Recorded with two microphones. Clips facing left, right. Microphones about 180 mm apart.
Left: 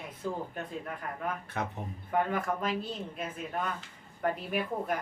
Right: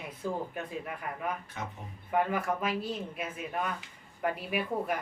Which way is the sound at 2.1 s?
5° right (ahead or behind).